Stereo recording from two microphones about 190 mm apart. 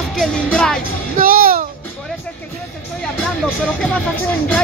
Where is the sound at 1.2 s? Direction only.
50° right (ahead or behind).